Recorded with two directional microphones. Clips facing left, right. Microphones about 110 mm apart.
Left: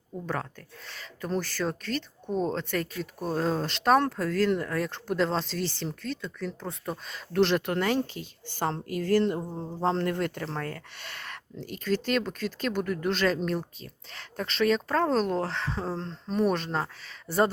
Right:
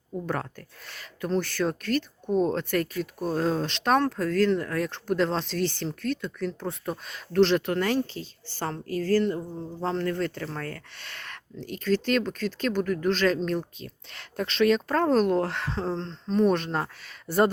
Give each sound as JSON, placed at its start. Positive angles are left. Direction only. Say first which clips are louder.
{"t": 0.9, "sound": "speech", "louder": "right 3 dB", "side_deg": 0}